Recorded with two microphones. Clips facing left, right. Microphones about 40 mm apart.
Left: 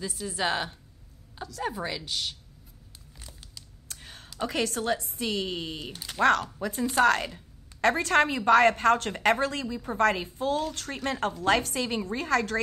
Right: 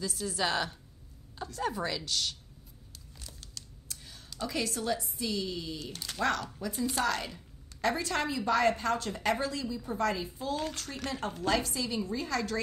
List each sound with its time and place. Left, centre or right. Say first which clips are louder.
0.0 s a woman's voice: left 2 dB; left
3.8 s a sound: left 3 dB; left
4.4 s a woman's voice: left 5 dB; left